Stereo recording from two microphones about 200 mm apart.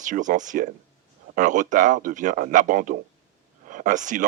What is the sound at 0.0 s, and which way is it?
Speech, 40° right (ahead or behind).